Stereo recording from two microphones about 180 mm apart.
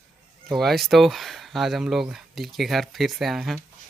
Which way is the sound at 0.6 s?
Centre (ahead or behind).